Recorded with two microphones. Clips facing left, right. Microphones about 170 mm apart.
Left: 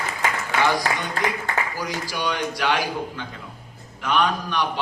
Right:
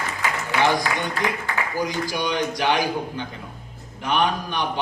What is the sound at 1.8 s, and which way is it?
A man's voice, 20° right (ahead or behind).